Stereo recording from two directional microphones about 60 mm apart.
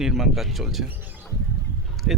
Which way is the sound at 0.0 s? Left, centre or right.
Centre.